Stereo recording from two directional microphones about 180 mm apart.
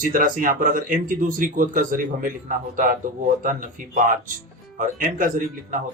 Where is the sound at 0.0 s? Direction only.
50° right (ahead or behind).